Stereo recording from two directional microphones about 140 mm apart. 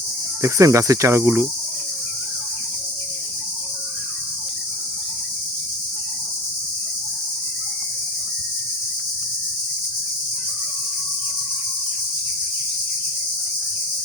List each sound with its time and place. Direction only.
0.4 s cricket: 20° right (ahead or behind)